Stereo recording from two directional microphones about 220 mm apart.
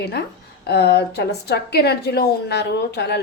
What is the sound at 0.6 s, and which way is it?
A woman's voice, 45° left (ahead or behind).